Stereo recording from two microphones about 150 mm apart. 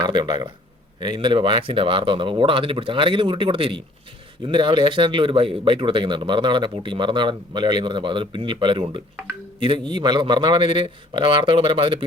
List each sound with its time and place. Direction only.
0.0 s speech: 30° right (ahead or behind)